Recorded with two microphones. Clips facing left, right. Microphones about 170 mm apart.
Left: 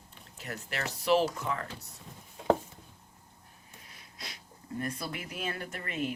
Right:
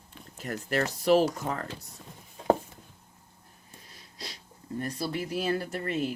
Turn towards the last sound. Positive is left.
turn(degrees=-35)  # may be behind; listen again after turning